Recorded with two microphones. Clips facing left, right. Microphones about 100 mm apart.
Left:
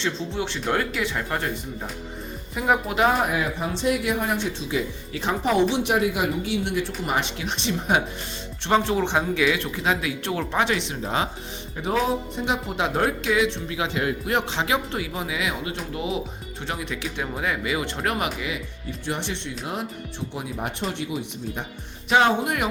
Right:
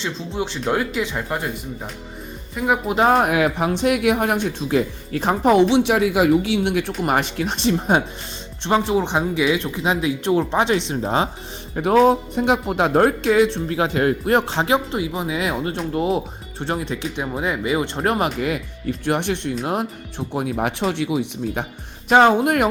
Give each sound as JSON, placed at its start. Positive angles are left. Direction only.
{"t": 0.0, "sound": "speech", "side_deg": -15}
{"t": 2.8, "sound": "speech", "side_deg": -30}
{"t": 3.1, "sound": "speech", "side_deg": -65}
{"t": 3.7, "sound": "speech", "side_deg": -60}
{"t": 5.7, "sound": "speech", "side_deg": -90}
{"t": 8.6, "sound": "speech", "side_deg": -15}
{"t": 11.7, "sound": "speech", "side_deg": -60}
{"t": 14.9, "sound": "speech", "side_deg": -20}
{"t": 15.4, "sound": "speech", "side_deg": -40}
{"t": 18.3, "sound": "speech", "side_deg": -55}
{"t": 20.5, "sound": "speech", "side_deg": -85}
{"t": 22.1, "sound": "speech", "side_deg": -50}